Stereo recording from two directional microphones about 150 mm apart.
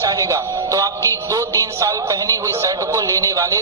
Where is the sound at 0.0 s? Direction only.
20° right (ahead or behind).